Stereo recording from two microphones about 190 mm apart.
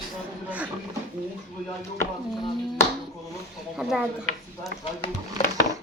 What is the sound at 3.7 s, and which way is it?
Speech, 5° right (ahead or behind).